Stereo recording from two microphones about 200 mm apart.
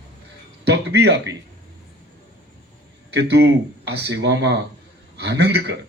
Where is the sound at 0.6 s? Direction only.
55° right (ahead or behind).